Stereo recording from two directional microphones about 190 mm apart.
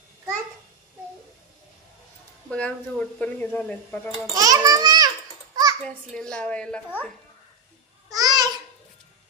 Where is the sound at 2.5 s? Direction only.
5° left (ahead or behind).